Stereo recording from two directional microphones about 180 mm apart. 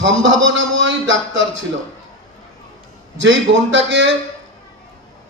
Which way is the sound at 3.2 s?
90° right.